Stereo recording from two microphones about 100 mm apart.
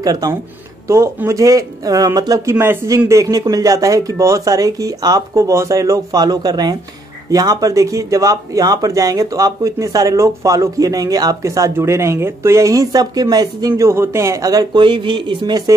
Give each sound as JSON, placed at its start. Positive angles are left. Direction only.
{"t": 0.0, "sound": "speech", "side_deg": -40}
{"t": 2.6, "sound": "speech", "side_deg": -25}